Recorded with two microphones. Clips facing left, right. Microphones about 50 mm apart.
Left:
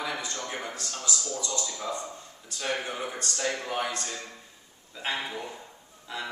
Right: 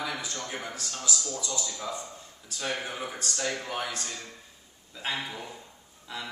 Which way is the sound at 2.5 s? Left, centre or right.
Centre.